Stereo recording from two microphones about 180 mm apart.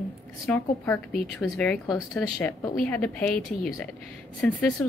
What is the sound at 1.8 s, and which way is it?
Speech, 20° left (ahead or behind).